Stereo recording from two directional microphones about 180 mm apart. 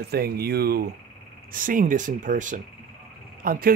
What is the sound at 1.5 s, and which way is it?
Speech, 50° right (ahead or behind).